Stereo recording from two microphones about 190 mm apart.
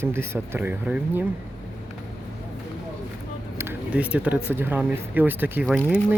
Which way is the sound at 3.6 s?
10° right (ahead or behind).